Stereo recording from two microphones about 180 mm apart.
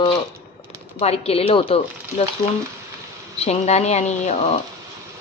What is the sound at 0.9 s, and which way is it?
A woman's voice, 35° left (ahead or behind).